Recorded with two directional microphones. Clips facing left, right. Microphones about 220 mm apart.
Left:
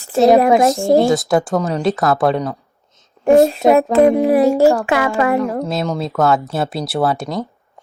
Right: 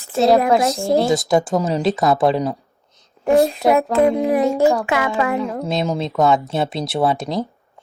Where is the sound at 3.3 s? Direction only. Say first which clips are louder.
Left 4 dB; 50° left (ahead or behind).